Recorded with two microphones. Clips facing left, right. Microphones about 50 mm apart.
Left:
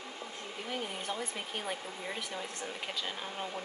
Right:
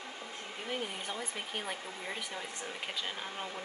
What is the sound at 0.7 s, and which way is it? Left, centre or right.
Speech, centre.